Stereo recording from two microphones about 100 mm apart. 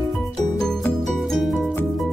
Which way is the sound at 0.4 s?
5° left (ahead or behind).